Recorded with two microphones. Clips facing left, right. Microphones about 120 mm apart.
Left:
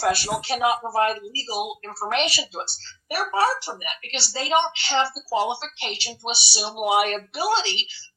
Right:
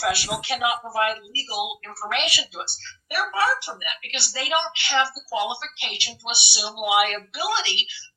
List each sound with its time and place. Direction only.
0.0 s speech: 40° left (ahead or behind)